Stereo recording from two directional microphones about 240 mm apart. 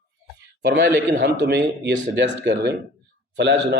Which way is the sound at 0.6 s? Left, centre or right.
Right.